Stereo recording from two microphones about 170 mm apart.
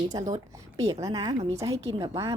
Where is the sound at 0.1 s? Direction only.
20° right (ahead or behind).